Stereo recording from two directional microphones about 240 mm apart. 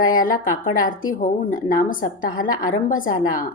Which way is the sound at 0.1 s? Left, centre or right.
Left.